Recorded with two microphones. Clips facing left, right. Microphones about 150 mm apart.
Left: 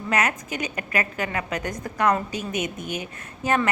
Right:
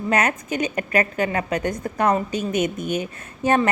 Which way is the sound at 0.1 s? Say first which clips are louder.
Right 3 dB; 30° right (ahead or behind).